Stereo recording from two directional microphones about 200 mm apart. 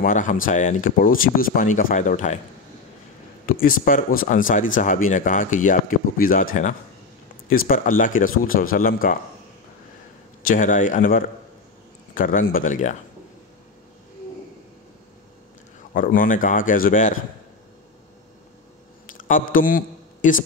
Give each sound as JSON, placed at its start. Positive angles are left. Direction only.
{"t": 0.0, "sound": "speech", "side_deg": 40}
{"t": 3.4, "sound": "speech", "side_deg": 45}
{"t": 7.4, "sound": "speech", "side_deg": 45}
{"t": 10.4, "sound": "speech", "side_deg": 40}
{"t": 15.9, "sound": "speech", "side_deg": 45}
{"t": 19.1, "sound": "a man's voice", "side_deg": 40}